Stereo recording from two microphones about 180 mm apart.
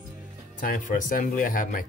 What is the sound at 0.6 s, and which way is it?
Speech, 50° left (ahead or behind).